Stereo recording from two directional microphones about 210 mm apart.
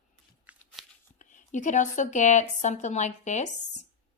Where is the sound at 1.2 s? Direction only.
35° left (ahead or behind).